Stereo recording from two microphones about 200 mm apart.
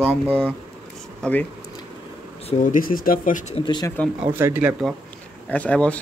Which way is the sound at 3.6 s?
20° left (ahead or behind).